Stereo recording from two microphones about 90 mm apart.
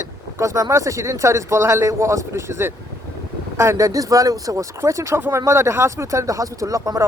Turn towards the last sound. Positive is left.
turn(degrees=-40)  # may be behind; listen again after turning